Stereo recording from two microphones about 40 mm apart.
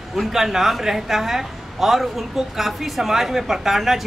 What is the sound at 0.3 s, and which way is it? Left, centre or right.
A woman's voice, centre.